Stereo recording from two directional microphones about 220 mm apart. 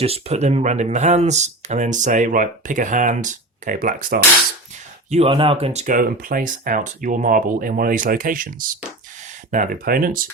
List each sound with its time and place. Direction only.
0.0 s speech: 30° right (ahead or behind)
5.1 s speech: 25° right (ahead or behind); by 10.2 s 40° right (ahead or behind)